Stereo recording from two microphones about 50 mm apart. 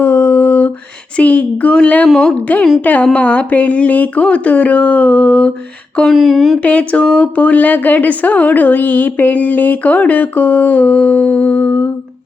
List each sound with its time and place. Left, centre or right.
0.0 s a sound: left
1.1 s a woman's voice: left
6.1 s speech: centre
6.6 s a woman's voice: left